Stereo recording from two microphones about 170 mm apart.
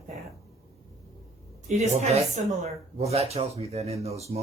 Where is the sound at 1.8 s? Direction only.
40° right (ahead or behind).